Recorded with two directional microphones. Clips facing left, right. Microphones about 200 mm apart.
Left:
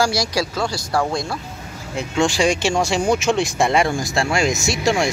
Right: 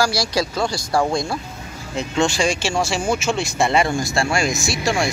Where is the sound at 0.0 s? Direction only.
20° left (ahead or behind).